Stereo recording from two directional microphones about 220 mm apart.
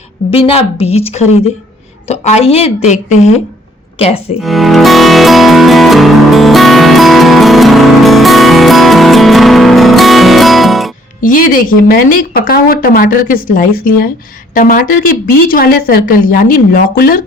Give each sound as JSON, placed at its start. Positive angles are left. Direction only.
{"t": 0.3, "sound": "a woman's voice", "side_deg": 25}
{"t": 4.4, "sound": "music", "side_deg": 0}
{"t": 11.2, "sound": "a woman's voice", "side_deg": 40}